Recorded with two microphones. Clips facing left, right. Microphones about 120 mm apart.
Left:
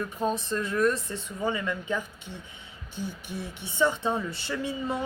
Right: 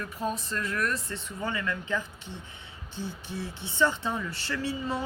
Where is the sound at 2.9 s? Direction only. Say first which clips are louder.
Left 1 dB; 15° left (ahead or behind).